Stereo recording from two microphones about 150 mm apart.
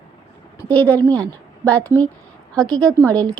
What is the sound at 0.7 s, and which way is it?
A woman's voice, 10° left (ahead or behind).